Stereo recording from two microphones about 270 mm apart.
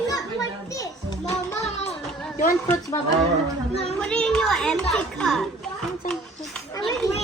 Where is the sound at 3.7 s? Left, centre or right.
Left.